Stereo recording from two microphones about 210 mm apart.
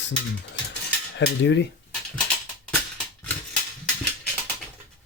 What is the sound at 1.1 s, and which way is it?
Speech, 55° left (ahead or behind).